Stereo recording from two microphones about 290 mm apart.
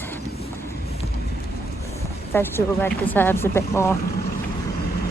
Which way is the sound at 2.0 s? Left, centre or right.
Centre.